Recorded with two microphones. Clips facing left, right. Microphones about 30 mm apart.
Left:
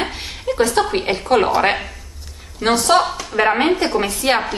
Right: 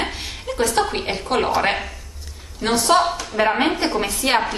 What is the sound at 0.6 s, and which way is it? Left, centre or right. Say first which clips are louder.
A woman's voice: left 3 dB; centre.